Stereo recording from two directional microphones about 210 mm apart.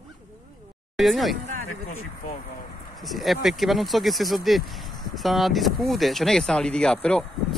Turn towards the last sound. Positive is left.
turn(degrees=5)  # may be behind; listen again after turning